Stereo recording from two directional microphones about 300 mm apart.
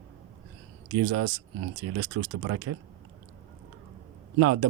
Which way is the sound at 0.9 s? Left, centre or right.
Right.